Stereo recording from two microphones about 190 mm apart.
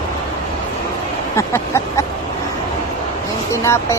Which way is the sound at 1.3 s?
15° left (ahead or behind).